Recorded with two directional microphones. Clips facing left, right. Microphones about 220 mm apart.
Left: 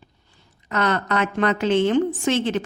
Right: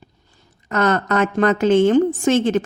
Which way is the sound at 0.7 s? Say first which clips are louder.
Right 4 dB; 45° right (ahead or behind).